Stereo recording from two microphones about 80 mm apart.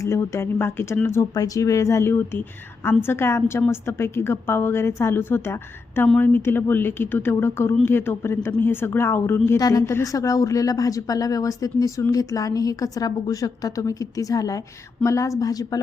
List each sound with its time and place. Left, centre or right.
0.0 s a woman's voice: left
1.4 s a woman's voice: left
9.6 s a woman's voice: left